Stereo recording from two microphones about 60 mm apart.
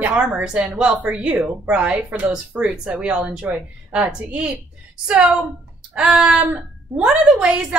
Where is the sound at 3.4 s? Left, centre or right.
Right.